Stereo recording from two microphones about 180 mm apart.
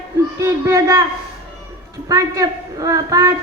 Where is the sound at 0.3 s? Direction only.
15° right (ahead or behind).